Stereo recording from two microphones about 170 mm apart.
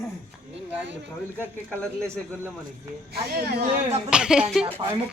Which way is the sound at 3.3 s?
65° right (ahead or behind).